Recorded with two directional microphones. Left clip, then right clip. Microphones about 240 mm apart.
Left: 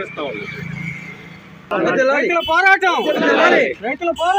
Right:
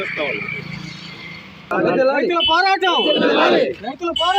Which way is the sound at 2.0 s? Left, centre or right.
Right.